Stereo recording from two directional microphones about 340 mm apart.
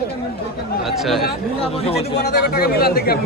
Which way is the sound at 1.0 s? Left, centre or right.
Centre.